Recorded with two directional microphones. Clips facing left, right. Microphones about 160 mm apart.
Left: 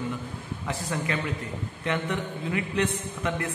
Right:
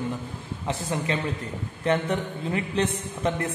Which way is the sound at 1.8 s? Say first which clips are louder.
Right 5 dB; 35° right (ahead or behind).